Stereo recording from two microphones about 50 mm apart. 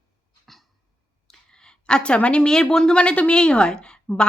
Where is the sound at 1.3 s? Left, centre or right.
Centre.